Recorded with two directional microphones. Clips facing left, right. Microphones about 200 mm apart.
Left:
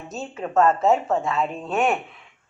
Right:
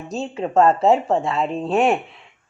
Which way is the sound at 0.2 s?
30° right (ahead or behind).